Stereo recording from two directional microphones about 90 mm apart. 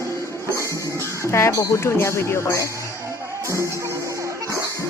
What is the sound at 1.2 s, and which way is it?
Speech, 30° left (ahead or behind).